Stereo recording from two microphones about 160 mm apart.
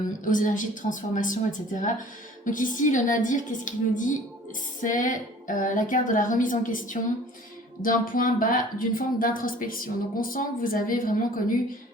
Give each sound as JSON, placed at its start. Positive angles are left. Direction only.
{"t": 0.3, "sound": "a woman's voice", "side_deg": 55}